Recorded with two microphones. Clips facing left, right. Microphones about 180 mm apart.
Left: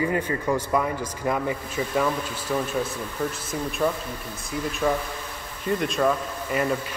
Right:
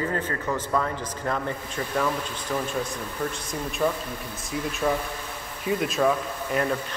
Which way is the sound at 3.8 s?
Centre (ahead or behind).